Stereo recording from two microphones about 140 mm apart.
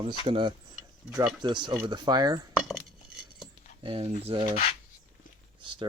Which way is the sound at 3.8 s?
40° right (ahead or behind).